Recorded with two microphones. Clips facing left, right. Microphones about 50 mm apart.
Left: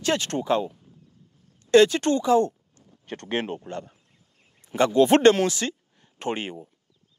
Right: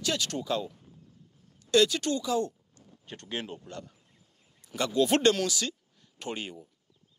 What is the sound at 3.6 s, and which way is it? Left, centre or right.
Speech, left.